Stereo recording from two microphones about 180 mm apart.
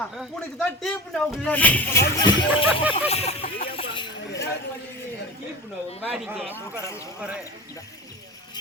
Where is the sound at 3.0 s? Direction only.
35° left (ahead or behind).